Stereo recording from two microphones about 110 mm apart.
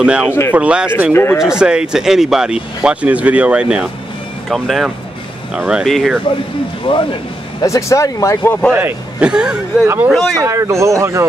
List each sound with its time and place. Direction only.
0.0 s speech: 10° right (ahead or behind)
1.1 s speech: 20° left (ahead or behind)
1.4 s speech: 5° right (ahead or behind)
4.5 s speech: centre (ahead or behind)
6.9 s speech: 50° left (ahead or behind)
7.6 s speech: 30° left (ahead or behind)
8.7 s a man's voice: 15° right (ahead or behind)
9.3 s speech: 5° right (ahead or behind)
9.8 s speech: 15° right (ahead or behind)
10.3 s speech: 25° right (ahead or behind)